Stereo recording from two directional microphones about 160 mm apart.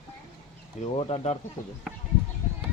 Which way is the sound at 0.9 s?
40° left (ahead or behind).